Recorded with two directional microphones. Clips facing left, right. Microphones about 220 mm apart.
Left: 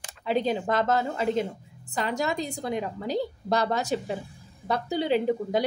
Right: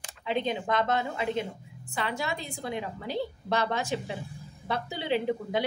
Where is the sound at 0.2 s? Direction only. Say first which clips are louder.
Left 4 dB; 40° left (ahead or behind).